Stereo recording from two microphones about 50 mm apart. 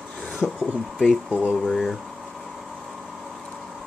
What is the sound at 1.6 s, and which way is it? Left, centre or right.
Speech, centre.